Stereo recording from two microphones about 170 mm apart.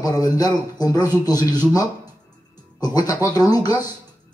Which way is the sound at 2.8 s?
20° left (ahead or behind).